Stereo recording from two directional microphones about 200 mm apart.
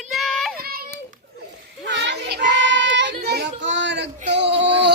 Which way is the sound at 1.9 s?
60° right (ahead or behind).